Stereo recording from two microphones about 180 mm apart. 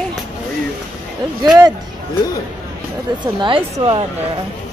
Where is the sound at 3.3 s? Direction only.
25° right (ahead or behind).